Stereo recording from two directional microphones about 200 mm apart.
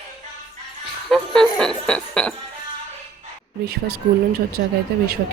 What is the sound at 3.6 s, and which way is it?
Speech, 50° right (ahead or behind).